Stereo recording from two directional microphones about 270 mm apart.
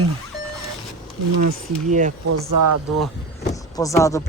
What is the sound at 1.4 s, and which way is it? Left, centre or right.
Speech, right.